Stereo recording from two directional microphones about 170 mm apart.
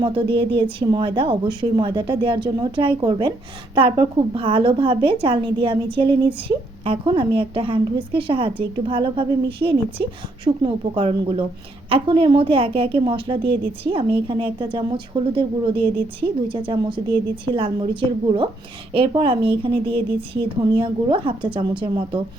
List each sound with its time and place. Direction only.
0.0 s a woman's voice: 30° right (ahead or behind)
18.9 s a woman's voice: 30° right (ahead or behind)